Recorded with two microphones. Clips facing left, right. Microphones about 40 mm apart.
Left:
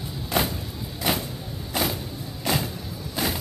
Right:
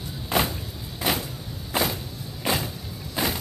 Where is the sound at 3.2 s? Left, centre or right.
Centre.